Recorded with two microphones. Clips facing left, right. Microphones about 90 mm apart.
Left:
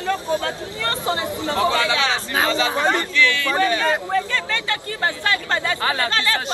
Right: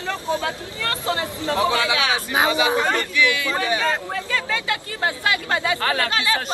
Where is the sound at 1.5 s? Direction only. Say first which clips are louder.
Even; 15° right (ahead or behind).